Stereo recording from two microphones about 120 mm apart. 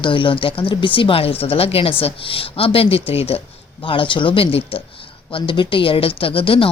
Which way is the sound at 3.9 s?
45° left (ahead or behind).